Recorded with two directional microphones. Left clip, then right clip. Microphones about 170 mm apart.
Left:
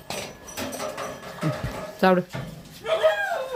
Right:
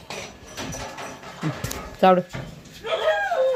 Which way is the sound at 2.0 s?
15° left (ahead or behind).